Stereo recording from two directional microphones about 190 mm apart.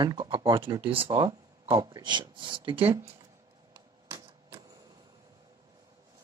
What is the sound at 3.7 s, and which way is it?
Typewriter, 15° right (ahead or behind).